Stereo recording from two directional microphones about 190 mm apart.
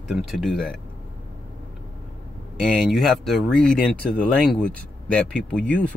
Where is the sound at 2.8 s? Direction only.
Centre (ahead or behind).